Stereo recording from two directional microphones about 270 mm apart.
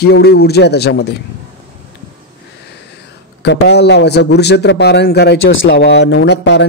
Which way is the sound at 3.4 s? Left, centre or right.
Left.